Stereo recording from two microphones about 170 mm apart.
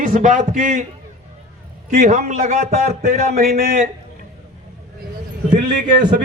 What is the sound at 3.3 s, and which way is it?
Speech, 60° right (ahead or behind).